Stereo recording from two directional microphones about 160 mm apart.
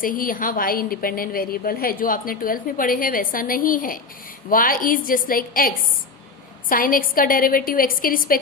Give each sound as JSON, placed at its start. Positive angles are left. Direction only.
{"t": 0.0, "sound": "a woman's voice", "side_deg": 60}